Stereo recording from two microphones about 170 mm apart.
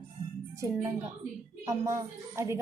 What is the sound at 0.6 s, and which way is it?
A woman's voice, 15° right (ahead or behind).